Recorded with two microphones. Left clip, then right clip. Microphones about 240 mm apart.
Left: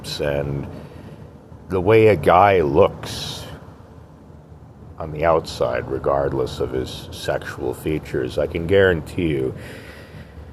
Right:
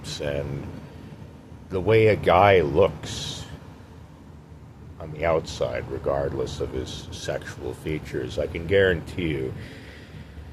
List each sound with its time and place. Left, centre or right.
0.0 s speech: left
1.7 s speech: left
4.9 s speech: left